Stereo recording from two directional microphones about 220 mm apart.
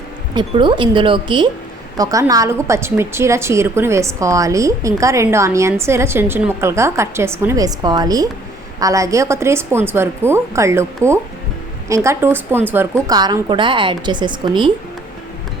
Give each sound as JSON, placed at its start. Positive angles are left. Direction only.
{"t": 0.3, "sound": "a woman's voice", "side_deg": -20}